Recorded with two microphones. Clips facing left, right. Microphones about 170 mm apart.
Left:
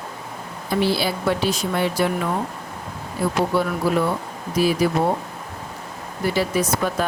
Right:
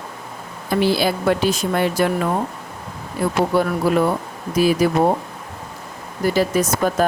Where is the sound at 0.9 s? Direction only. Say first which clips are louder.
Right 4 dB; 50° right (ahead or behind).